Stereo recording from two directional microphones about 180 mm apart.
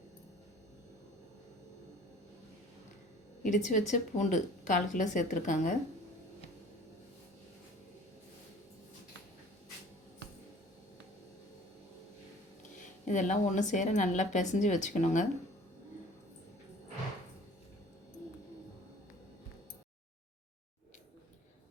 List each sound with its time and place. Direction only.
3.4 s a woman's voice: 45° left (ahead or behind)
13.1 s a woman's voice: 45° left (ahead or behind)